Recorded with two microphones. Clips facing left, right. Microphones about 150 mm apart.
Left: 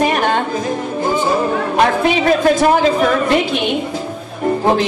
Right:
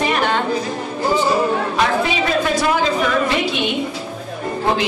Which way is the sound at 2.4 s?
40° left (ahead or behind).